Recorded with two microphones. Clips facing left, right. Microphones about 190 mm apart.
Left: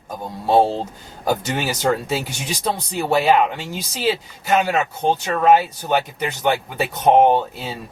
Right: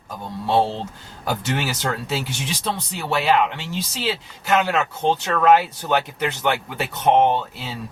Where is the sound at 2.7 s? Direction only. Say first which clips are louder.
Left 8 dB; 45° left (ahead or behind).